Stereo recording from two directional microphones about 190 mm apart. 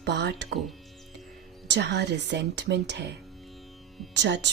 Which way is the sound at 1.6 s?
65° right (ahead or behind).